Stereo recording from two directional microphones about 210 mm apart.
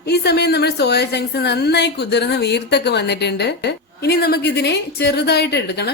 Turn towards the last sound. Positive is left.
turn(degrees=50)  # may be behind; listen again after turning